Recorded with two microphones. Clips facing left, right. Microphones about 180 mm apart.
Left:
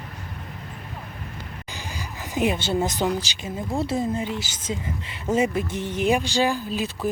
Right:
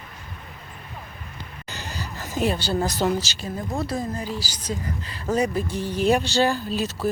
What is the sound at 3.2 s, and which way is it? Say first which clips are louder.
Speech: right 1 dB; 15° left (ahead or behind).